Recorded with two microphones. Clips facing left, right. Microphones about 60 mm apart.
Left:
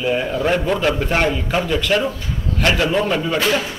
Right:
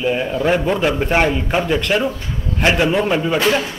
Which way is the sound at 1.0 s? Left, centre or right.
Centre.